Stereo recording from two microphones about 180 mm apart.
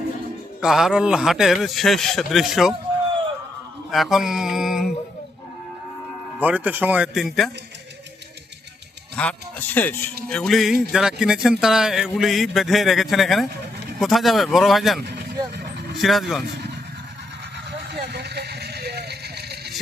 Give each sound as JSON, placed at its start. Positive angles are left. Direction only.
{"t": 0.6, "sound": "a man's voice", "side_deg": 0}
{"t": 3.9, "sound": "a man's voice", "side_deg": 0}
{"t": 6.4, "sound": "speech", "side_deg": -10}
{"t": 9.1, "sound": "a man's voice", "side_deg": 10}
{"t": 17.7, "sound": "vehicle", "side_deg": -65}